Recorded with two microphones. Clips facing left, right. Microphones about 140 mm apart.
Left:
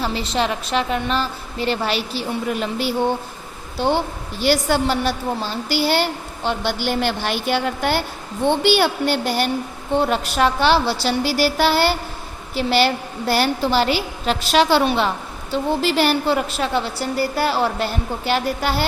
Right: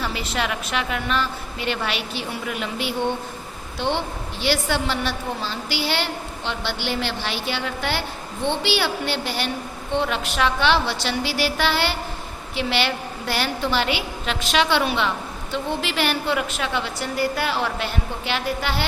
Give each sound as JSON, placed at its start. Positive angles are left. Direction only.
{"t": 0.0, "sound": "a woman's voice", "side_deg": 30}